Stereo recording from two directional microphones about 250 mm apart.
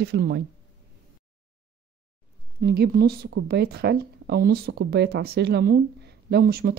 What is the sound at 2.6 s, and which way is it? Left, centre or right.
Speech, right.